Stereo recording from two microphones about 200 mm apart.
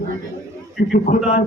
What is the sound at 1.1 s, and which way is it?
Speech, 40° left (ahead or behind).